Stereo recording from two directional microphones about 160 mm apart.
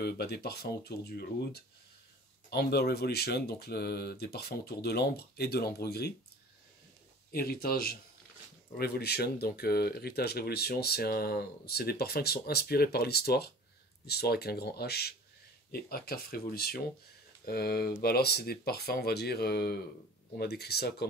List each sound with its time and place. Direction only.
0.0 s speech: 80° left
7.3 s speech: 70° left (ahead or behind)
15.7 s speech: 70° left (ahead or behind)